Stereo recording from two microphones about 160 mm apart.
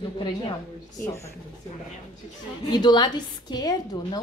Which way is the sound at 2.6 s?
25° left (ahead or behind).